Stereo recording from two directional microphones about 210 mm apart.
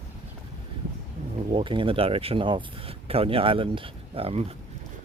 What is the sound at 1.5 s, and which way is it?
Speech, 25° right (ahead or behind).